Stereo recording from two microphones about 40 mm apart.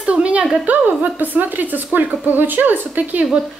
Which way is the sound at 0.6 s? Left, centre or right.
Right.